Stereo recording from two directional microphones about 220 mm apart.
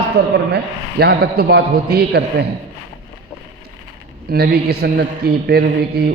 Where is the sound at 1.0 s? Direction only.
45° right (ahead or behind).